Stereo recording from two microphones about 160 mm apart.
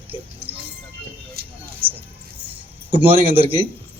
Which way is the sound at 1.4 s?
75° right (ahead or behind).